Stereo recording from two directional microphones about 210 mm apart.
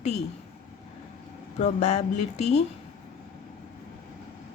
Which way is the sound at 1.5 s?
30° left (ahead or behind).